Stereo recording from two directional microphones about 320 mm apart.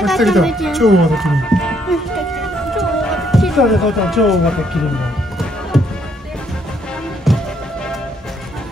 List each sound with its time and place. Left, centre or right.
0.0 s music: centre
7.3 s music: centre